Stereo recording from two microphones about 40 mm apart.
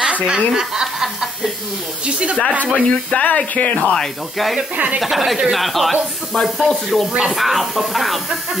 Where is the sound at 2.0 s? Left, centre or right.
Right.